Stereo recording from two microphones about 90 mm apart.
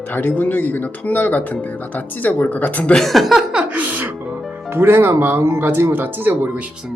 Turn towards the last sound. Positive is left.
turn(degrees=-25)  # may be behind; listen again after turning